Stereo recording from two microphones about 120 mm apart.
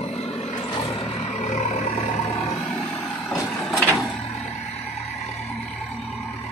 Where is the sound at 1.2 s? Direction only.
60° left (ahead or behind).